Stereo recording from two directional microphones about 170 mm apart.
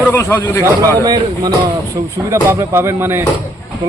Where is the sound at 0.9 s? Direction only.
25° right (ahead or behind).